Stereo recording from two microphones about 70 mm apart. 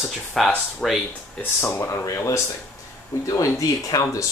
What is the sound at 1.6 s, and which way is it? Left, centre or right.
Speech, left.